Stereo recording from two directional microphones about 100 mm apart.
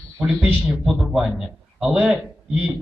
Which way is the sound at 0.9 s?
5° right (ahead or behind).